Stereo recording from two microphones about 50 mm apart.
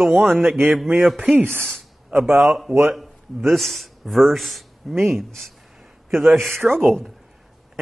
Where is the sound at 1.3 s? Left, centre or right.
Right.